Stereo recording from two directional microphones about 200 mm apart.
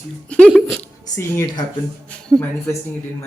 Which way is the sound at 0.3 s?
5° left (ahead or behind).